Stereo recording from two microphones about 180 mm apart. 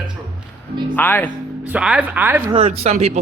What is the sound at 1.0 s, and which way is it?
Speech, 10° left (ahead or behind).